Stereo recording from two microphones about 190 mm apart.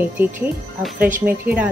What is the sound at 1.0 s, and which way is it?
Speech, 45° right (ahead or behind).